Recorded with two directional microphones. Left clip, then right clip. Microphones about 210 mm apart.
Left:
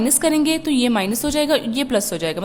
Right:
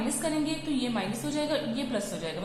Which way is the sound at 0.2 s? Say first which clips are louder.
Left 12 dB; 50° left (ahead or behind).